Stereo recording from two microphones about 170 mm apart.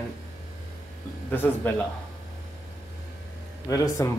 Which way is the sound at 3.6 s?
20° left (ahead or behind).